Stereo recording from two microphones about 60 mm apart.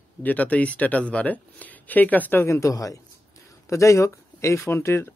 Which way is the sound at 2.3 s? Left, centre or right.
Left.